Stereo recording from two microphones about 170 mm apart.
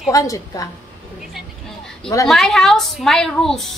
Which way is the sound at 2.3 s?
Centre (ahead or behind).